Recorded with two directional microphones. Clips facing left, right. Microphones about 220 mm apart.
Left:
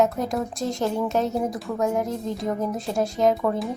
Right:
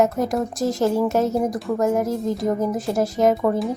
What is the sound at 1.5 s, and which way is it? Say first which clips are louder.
Speech: right 4 dB; centre (ahead or behind).